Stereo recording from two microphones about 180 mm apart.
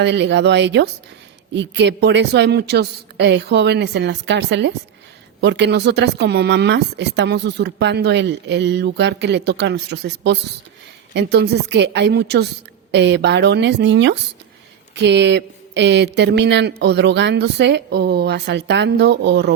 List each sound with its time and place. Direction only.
0.0 s speech: 80° right